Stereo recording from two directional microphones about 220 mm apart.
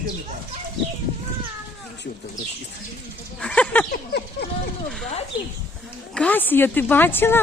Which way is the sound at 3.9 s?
45° left (ahead or behind).